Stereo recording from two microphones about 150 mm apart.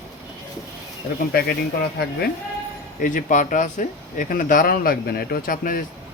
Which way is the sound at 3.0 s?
60° left (ahead or behind).